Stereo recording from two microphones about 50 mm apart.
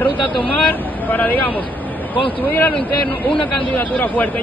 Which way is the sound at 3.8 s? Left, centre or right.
Left.